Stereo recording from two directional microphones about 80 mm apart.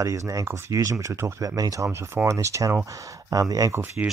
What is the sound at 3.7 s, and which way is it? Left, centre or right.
Speech, right.